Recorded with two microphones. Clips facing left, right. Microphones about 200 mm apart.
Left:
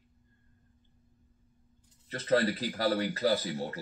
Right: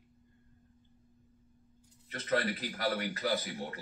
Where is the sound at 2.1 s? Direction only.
35° left (ahead or behind).